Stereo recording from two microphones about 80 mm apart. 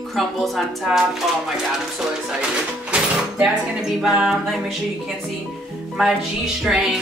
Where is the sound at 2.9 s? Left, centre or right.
Centre.